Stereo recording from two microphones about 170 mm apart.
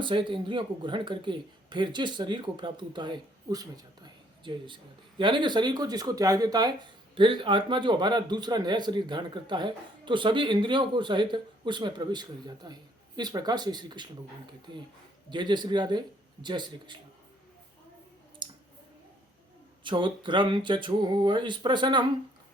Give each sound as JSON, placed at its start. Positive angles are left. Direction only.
{"t": 0.0, "sound": "a man's voice", "side_deg": -30}
{"t": 18.4, "sound": "clicking", "side_deg": -25}
{"t": 19.8, "sound": "a man's voice", "side_deg": -30}